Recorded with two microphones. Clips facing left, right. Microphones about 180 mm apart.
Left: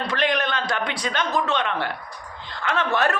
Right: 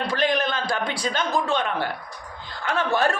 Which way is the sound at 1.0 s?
5° right (ahead or behind).